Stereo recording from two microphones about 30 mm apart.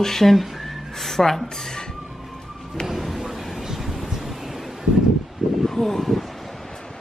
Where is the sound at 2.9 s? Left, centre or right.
Centre.